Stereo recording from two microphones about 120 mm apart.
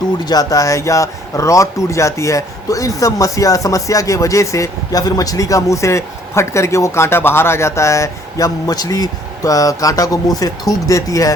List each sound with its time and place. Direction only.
0.3 s speech: 30° left (ahead or behind)